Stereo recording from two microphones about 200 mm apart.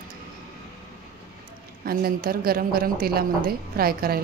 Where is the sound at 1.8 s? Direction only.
50° right (ahead or behind).